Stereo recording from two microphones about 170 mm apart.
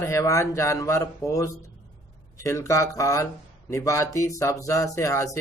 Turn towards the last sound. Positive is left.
turn(degrees=20)  # may be behind; listen again after turning